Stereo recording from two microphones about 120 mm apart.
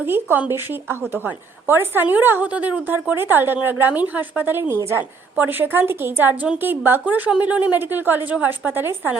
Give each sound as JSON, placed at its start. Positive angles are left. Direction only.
{"t": 0.0, "sound": "a woman's voice", "side_deg": -15}